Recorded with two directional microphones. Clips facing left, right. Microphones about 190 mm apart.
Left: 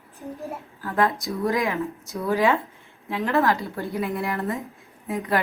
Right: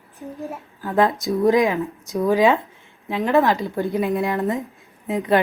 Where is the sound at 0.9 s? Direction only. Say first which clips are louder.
Right 5 dB; 15° right (ahead or behind).